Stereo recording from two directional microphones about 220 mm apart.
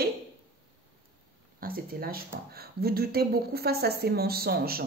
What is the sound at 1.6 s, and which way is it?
Speech, 40° right (ahead or behind).